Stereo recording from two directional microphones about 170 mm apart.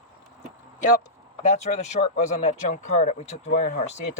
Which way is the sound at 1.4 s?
40° left (ahead or behind).